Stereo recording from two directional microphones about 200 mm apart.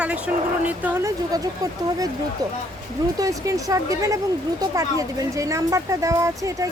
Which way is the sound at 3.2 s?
15° right (ahead or behind).